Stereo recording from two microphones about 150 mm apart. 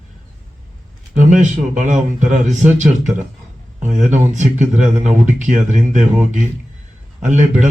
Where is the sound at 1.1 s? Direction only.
55° right (ahead or behind).